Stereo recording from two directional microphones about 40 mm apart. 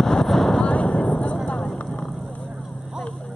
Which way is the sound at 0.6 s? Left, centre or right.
Left.